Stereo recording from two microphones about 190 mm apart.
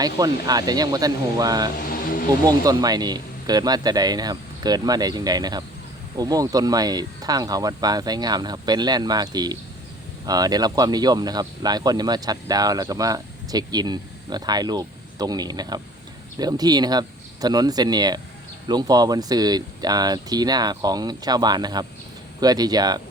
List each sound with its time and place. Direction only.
0.0 s speech: 20° right (ahead or behind)
1.9 s vehicle: 50° left (ahead or behind)
2.4 s speech: 20° right (ahead or behind)